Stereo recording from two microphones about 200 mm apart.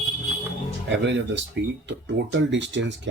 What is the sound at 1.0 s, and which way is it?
Speech, 60° right (ahead or behind).